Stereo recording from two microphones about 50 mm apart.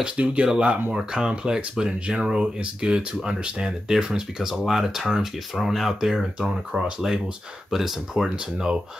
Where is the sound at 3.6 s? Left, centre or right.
Centre.